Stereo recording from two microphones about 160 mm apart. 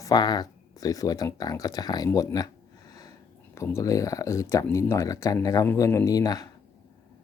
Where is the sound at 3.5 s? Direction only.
15° left (ahead or behind).